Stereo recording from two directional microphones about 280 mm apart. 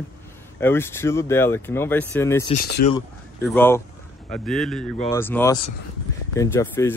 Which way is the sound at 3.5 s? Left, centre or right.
Centre.